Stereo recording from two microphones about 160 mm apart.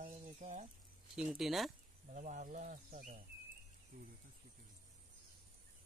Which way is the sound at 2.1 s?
50° right (ahead or behind).